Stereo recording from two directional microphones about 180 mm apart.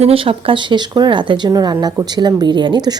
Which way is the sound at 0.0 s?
30° right (ahead or behind).